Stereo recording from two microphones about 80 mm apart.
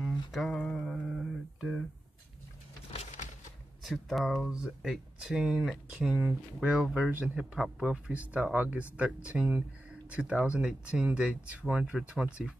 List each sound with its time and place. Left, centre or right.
0.0 s a sound: centre
0.7 s mantra: centre
3.8 s speech: centre
4.5 s speech: centre
6.1 s speech: centre
7.5 s speech: centre